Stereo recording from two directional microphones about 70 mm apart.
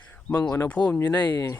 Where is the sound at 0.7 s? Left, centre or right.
Left.